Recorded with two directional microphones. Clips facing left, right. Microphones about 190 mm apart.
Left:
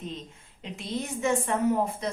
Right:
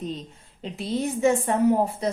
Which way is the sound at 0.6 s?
35° right (ahead or behind).